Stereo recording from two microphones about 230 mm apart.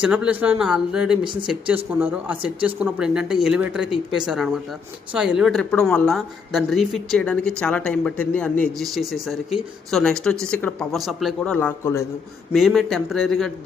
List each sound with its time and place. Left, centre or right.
0.0 s a woman's voice: centre
1.2 s speech: right
1.5 s a woman's voice: centre